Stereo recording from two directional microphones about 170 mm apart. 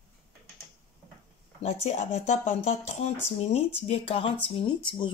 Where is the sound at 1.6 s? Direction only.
45° left (ahead or behind).